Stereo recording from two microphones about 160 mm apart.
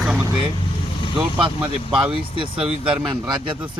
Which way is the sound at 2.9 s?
5° right (ahead or behind).